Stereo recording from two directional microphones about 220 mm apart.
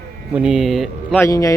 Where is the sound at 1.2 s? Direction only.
15° left (ahead or behind).